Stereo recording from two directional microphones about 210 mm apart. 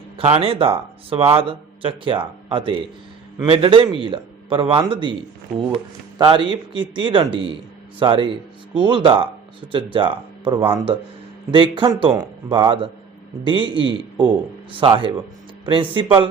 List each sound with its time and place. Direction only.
0.2 s a man's voice: 25° right (ahead or behind)